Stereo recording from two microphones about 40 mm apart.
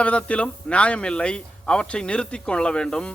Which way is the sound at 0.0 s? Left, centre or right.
Left.